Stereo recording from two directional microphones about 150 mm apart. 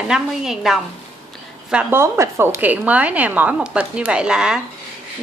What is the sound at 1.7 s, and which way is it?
Speech, 15° right (ahead or behind).